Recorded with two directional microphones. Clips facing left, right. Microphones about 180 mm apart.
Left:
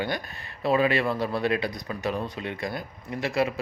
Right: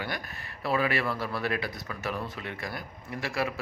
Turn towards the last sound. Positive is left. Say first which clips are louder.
# left 5 dB
turn(degrees=20)  # may be behind; listen again after turning